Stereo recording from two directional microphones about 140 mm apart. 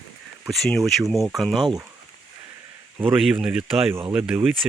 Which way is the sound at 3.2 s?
5° right (ahead or behind).